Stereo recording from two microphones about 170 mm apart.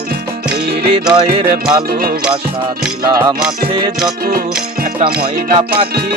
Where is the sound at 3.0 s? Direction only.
20° right (ahead or behind).